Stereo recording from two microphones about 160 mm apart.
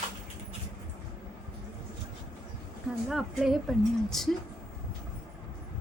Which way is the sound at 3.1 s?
Centre (ahead or behind).